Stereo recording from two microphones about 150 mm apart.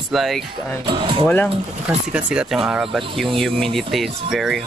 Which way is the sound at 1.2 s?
15° left (ahead or behind).